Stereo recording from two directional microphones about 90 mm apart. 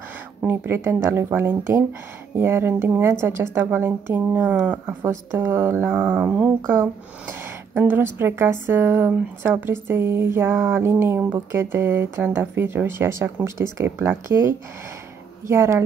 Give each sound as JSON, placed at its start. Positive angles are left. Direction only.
{"t": 0.4, "sound": "speech", "side_deg": -25}
{"t": 6.7, "sound": "speech", "side_deg": -25}